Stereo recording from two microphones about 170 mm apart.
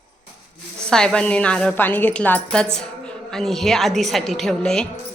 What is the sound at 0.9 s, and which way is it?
Speech, 5° left (ahead or behind).